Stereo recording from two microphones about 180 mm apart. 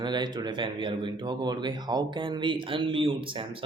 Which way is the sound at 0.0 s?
25° right (ahead or behind).